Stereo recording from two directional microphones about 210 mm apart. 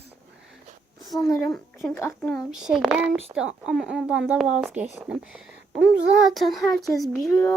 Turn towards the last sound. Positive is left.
turn(degrees=15)  # may be behind; listen again after turning